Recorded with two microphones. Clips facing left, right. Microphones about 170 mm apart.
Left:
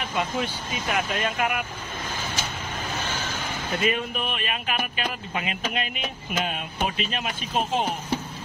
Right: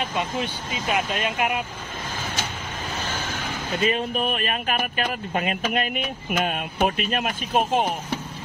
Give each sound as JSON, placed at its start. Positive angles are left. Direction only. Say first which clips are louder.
{"t": 0.8, "sound": "speech", "louder": "right 2 dB", "side_deg": -20}
{"t": 3.8, "sound": "speech", "louder": "right 4 dB", "side_deg": -35}